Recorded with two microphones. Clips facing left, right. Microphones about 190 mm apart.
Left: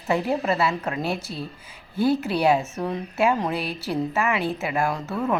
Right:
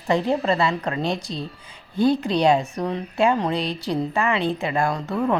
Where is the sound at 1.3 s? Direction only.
25° right (ahead or behind).